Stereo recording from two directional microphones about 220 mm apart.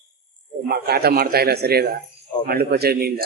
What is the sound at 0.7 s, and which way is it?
Speech, 45° right (ahead or behind).